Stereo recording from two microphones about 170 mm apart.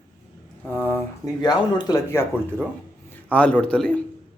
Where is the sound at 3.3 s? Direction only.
5° left (ahead or behind).